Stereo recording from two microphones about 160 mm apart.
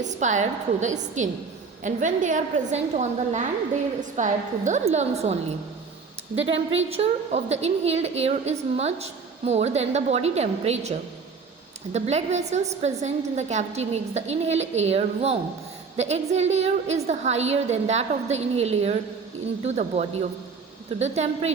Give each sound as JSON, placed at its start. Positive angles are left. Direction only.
{"t": 0.0, "sound": "a woman's voice", "side_deg": -50}
{"t": 6.4, "sound": "a woman's voice", "side_deg": -35}
{"t": 11.9, "sound": "a woman's voice", "side_deg": -45}